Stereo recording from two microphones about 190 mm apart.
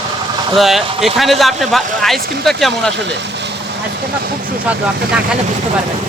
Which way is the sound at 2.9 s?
65° right (ahead or behind).